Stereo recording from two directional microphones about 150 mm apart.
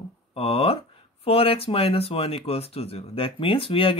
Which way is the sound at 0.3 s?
40° left (ahead or behind).